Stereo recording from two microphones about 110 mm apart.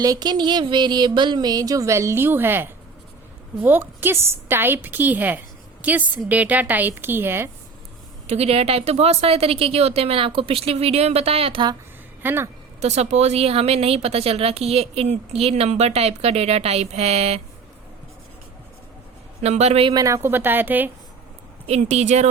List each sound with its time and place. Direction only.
0.0 s a sound: 35° right (ahead or behind); by 2.6 s 20° right (ahead or behind)
3.6 s a woman's voice: 20° right (ahead or behind)
8.3 s a woman's voice: 70° right (ahead or behind)
12.2 s a woman's voice: 20° right (ahead or behind)
12.8 s speech: 80° right
19.4 s speech: 80° right
19.9 s a woman's voice: 30° right (ahead or behind); by 20.9 s 15° right (ahead or behind)
21.7 s speech: 85° right